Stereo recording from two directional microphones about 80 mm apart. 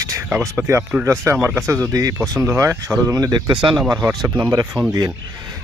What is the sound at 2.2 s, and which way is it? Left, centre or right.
Speech, right.